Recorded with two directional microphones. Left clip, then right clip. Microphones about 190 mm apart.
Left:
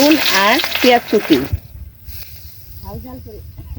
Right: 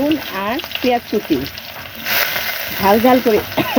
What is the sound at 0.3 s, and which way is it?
Frying, 40° left (ahead or behind).